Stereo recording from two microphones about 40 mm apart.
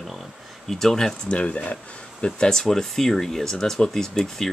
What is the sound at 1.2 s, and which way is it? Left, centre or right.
Speech, left.